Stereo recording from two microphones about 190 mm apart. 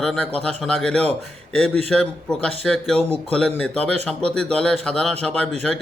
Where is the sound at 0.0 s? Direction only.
5° left (ahead or behind).